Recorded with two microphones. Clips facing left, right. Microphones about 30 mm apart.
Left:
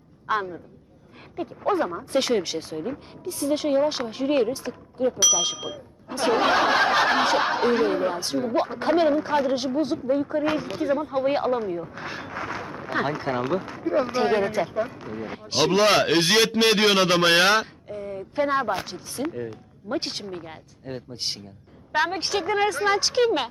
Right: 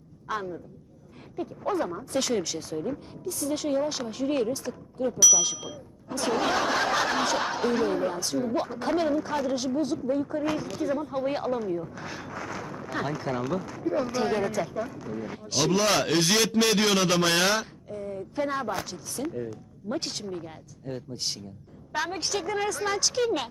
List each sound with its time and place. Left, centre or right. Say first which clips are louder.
0.3 s speech: left 6 dB; left